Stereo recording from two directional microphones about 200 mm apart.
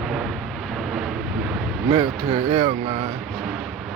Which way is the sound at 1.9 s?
30° right (ahead or behind).